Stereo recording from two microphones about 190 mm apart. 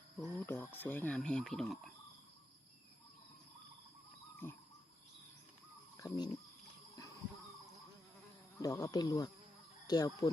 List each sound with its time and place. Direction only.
0.2 s speech: 10° left (ahead or behind)
6.0 s speech: 20° left (ahead or behind)
8.5 s speech: 15° left (ahead or behind)